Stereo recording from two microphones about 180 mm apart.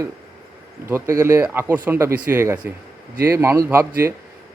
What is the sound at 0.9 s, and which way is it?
Speech, 15° right (ahead or behind).